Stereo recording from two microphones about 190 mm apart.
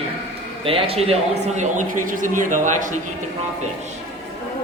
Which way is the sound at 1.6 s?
40° right (ahead or behind).